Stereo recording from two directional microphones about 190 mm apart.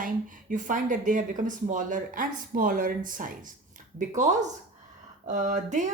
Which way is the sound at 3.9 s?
40° right (ahead or behind).